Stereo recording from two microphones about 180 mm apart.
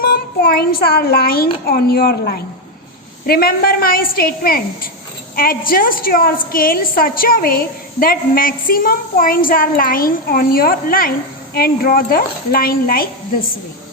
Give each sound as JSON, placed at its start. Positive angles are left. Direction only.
{"t": 0.0, "sound": "child singing", "side_deg": 55}
{"t": 1.6, "sound": "a woman's voice", "side_deg": 55}